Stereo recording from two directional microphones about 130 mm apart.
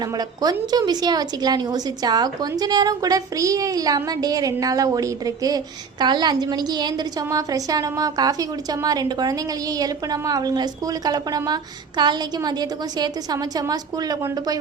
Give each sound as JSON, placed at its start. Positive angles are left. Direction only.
{"t": 0.0, "sound": "a woman's voice", "side_deg": -30}